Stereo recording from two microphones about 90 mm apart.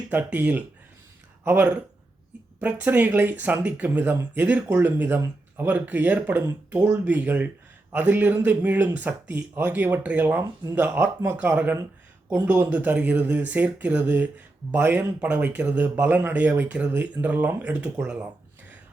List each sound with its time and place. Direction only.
0.1 s speech: 20° right (ahead or behind)
6.7 s speech: 35° right (ahead or behind)
7.0 s speech: 20° right (ahead or behind)